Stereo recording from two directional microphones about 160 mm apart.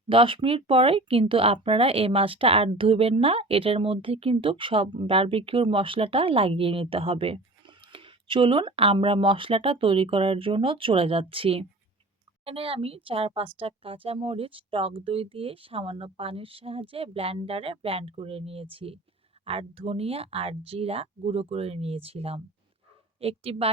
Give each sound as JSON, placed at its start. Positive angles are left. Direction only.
{"t": 0.1, "sound": "speech", "side_deg": -35}